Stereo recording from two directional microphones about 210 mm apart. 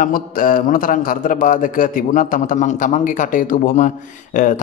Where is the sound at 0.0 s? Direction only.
40° left (ahead or behind).